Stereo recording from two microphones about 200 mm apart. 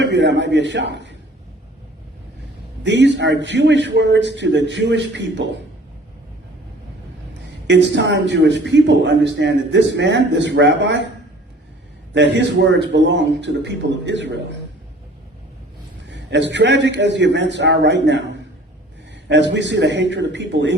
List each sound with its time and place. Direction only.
0.0 s a man's voice: 60° right (ahead or behind)
2.8 s a man's voice: 60° right (ahead or behind)
7.7 s a man's voice: 60° right (ahead or behind)
12.1 s a man's voice: 60° right (ahead or behind)
16.0 s a man's voice: 60° right (ahead or behind)